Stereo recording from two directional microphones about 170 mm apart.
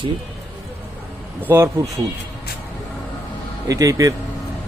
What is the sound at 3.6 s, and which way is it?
Speech, 20° right (ahead or behind).